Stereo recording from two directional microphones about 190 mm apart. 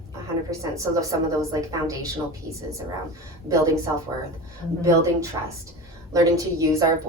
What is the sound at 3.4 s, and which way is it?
A woman's voice, 15° right (ahead or behind).